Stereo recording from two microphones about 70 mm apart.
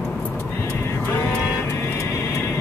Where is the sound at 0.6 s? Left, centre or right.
Left.